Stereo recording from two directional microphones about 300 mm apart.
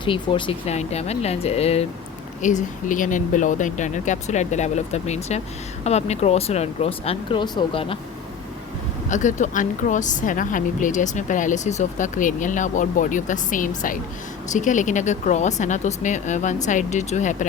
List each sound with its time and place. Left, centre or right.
0.0 s a woman's voice: centre
9.0 s a woman's voice: left